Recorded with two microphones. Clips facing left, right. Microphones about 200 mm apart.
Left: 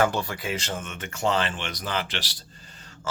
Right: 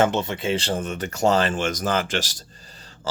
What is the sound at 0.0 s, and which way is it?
Speech, 25° right (ahead or behind).